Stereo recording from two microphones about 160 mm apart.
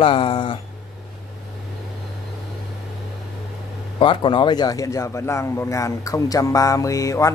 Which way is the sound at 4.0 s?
30° left (ahead or behind).